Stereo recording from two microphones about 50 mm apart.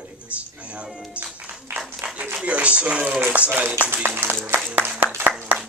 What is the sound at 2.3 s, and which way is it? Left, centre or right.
A man's voice, right.